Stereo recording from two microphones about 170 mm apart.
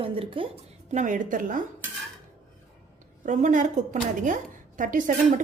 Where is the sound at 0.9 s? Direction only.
45° right (ahead or behind).